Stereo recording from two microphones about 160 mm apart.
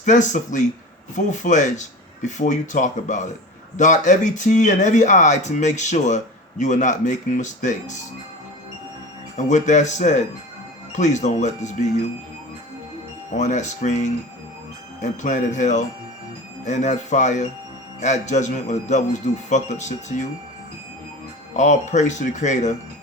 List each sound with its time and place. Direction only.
0.0 s speech: 50° left (ahead or behind)
9.4 s speech: 50° left (ahead or behind)
13.3 s speech: 50° left (ahead or behind)
21.5 s speech: 45° left (ahead or behind)